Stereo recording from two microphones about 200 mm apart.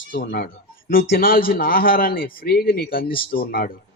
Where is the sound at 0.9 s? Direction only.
45° left (ahead or behind).